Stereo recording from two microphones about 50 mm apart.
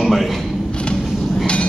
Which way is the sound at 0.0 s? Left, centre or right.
Centre.